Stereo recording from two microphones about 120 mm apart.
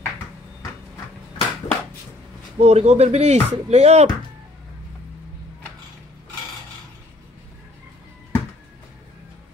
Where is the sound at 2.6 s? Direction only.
65° right (ahead or behind).